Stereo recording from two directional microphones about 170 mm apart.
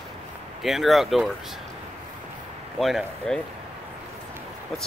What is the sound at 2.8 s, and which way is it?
Speech, centre (ahead or behind).